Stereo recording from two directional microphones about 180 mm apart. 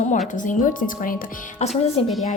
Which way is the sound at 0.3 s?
45° left (ahead or behind).